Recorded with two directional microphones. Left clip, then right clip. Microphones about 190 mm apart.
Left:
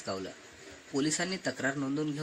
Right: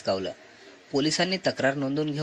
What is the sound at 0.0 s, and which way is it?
A man's voice, 25° right (ahead or behind).